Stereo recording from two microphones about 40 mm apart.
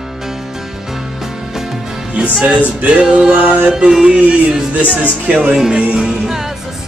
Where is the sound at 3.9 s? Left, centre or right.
Centre.